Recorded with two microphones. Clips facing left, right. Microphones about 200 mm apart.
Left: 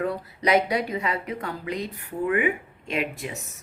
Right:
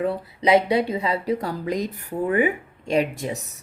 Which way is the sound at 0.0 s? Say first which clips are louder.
Right 3 dB; 30° right (ahead or behind).